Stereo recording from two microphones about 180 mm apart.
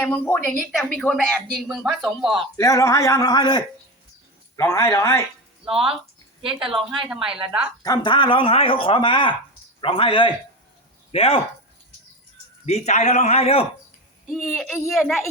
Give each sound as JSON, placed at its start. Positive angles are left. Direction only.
{"t": 0.0, "sound": "a man's voice", "side_deg": 10}
{"t": 2.6, "sound": "a man's voice", "side_deg": 15}
{"t": 5.6, "sound": "speech", "side_deg": -5}
{"t": 7.9, "sound": "speech", "side_deg": 25}
{"t": 12.6, "sound": "a man's voice", "side_deg": 40}
{"t": 14.3, "sound": "speech", "side_deg": 0}